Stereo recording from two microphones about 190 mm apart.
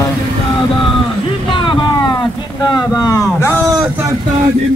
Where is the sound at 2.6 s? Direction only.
20° left (ahead or behind).